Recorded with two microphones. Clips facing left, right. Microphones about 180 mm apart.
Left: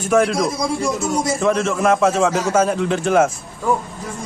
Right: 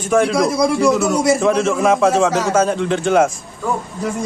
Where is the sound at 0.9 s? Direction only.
70° right (ahead or behind).